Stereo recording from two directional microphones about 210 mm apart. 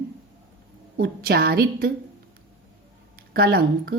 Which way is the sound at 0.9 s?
45° right (ahead or behind).